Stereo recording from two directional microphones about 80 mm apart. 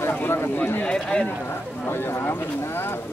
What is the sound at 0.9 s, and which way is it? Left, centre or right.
Speech, centre.